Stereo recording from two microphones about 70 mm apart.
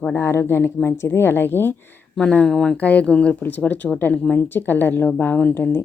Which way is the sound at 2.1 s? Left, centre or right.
Centre.